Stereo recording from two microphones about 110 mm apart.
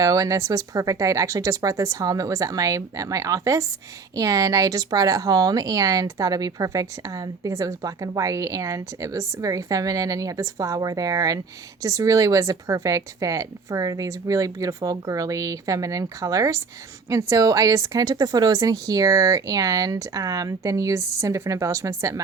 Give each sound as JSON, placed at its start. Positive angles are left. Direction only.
{"t": 0.0, "sound": "speech", "side_deg": -30}